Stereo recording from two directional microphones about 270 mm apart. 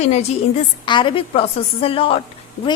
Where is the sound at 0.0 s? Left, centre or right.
Left.